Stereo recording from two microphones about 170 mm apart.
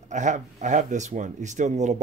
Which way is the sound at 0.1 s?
45° right (ahead or behind).